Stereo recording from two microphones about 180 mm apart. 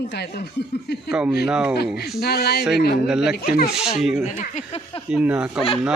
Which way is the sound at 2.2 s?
60° left (ahead or behind).